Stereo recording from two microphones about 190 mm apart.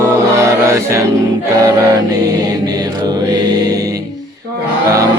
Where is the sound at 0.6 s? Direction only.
15° right (ahead or behind).